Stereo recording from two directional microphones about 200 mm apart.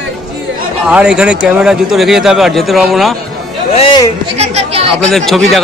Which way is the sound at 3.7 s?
25° left (ahead or behind).